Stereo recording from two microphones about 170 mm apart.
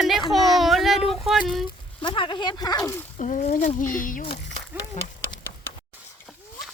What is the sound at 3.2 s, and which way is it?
Speech, 45° left (ahead or behind).